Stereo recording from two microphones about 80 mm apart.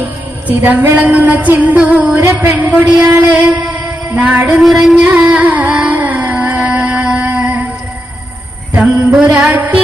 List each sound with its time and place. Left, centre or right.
0.0 s music: centre
2.4 s a man's voice: right
3.1 s a sound: centre
4.6 s carnatic music: centre
8.8 s music: centre